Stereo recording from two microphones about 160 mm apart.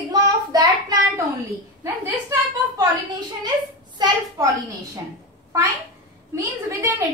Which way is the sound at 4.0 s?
25° right (ahead or behind).